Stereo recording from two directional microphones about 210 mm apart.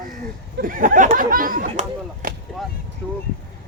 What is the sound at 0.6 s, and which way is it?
Speech, 40° right (ahead or behind).